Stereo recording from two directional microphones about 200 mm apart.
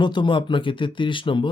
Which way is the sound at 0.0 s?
20° left (ahead or behind).